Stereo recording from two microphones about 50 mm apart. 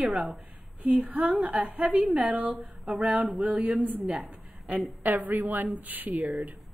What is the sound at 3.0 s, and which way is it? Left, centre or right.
Speech, right.